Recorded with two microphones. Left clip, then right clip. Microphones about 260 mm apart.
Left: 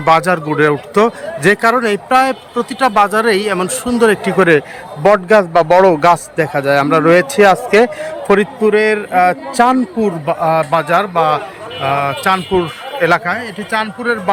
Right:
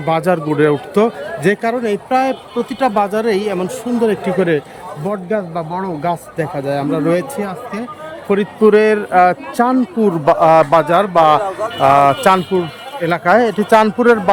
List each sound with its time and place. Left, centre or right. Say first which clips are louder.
0.0 s a man's voice: left 4 dB; centre
5.0 s a man's voice: left 11 dB; left
6.3 s a man's voice: left 6 dB; centre
8.3 s a man's voice: even; centre